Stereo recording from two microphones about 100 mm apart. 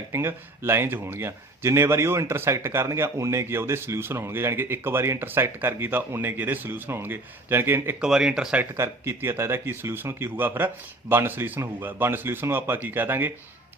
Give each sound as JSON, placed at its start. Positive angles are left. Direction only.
{"t": 0.1, "sound": "speech", "side_deg": -25}
{"t": 8.0, "sound": "speech", "side_deg": -5}
{"t": 8.7, "sound": "speech", "side_deg": -25}